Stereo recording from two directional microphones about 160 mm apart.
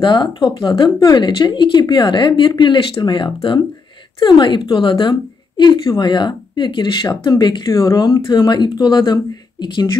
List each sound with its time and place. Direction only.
0.0 s speech: 30° left (ahead or behind)